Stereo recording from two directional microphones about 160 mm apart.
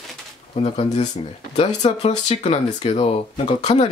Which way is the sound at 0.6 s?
40° left (ahead or behind).